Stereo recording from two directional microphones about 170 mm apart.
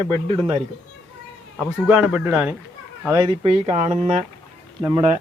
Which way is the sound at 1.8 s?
5° right (ahead or behind).